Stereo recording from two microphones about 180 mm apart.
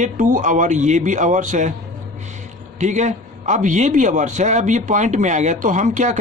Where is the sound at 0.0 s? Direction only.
45° right (ahead or behind).